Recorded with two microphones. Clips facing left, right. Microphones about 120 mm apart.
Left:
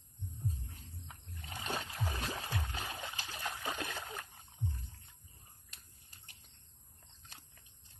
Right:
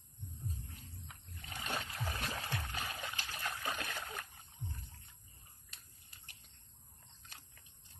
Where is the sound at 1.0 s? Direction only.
35° left (ahead or behind).